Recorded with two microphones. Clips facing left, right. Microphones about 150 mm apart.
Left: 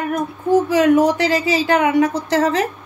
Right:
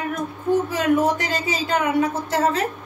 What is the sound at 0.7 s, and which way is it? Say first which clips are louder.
A woman's voice: left 6 dB; 85° left.